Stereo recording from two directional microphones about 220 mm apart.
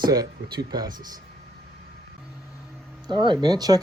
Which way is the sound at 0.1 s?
15° right (ahead or behind).